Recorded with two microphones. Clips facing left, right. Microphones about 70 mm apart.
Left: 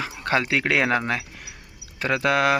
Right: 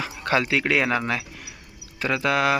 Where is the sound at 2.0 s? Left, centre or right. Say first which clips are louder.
Left 1 dB; left.